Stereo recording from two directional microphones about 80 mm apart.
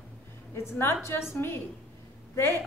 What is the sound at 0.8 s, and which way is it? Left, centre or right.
Speech, left.